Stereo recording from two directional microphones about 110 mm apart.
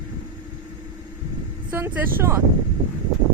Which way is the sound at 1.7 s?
20° right (ahead or behind).